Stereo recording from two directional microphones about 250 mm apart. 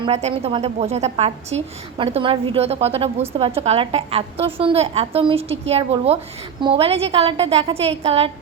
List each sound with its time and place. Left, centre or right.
0.0 s a woman's voice: right